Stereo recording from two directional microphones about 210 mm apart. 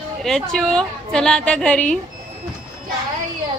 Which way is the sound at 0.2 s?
Centre (ahead or behind).